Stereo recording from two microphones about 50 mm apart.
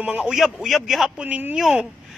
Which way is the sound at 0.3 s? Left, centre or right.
Centre.